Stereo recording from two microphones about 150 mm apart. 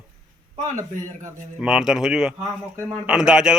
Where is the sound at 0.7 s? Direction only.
20° right (ahead or behind).